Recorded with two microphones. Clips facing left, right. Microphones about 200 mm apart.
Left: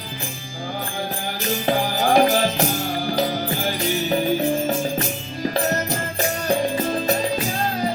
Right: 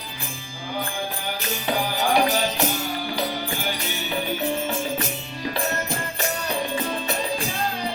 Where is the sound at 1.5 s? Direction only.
40° left (ahead or behind).